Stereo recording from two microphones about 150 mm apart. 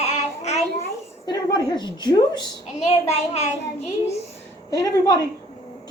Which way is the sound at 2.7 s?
45° left (ahead or behind).